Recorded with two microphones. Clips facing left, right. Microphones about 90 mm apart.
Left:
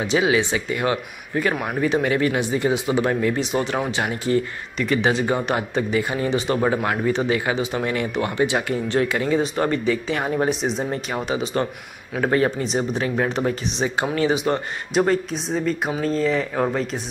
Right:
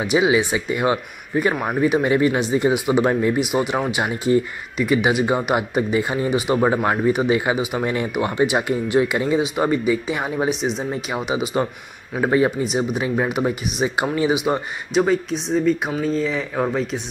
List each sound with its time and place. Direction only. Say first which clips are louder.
0.1 s speech: right 2 dB; 20° right (ahead or behind); by 17.0 s centre (ahead or behind)